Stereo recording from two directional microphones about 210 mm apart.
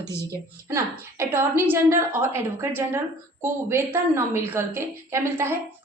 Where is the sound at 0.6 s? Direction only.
15° right (ahead or behind).